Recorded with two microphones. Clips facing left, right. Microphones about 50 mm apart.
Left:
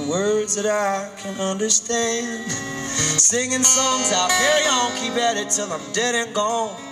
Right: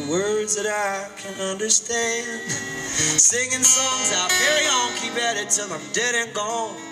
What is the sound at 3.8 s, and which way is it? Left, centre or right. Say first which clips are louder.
Music: left 6 dB; right.